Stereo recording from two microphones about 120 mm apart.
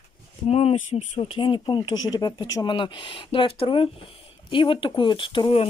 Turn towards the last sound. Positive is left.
turn(degrees=45)  # may be behind; listen again after turning